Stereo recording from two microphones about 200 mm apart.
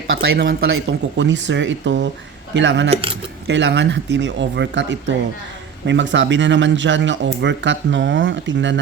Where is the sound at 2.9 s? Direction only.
25° right (ahead or behind).